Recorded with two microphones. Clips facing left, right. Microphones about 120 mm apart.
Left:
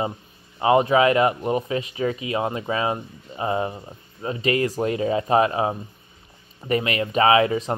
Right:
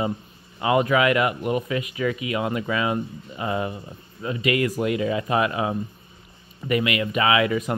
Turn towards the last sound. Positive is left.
turn(degrees=30)  # may be behind; listen again after turning